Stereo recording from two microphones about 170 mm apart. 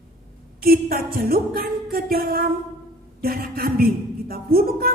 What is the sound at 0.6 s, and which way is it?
A woman's voice, 60° right (ahead or behind).